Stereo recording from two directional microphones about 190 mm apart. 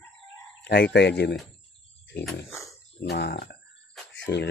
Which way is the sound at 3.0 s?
60° left (ahead or behind).